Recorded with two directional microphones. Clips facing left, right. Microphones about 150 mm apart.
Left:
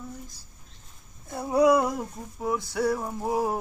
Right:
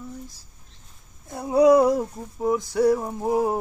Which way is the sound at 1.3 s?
20° right (ahead or behind).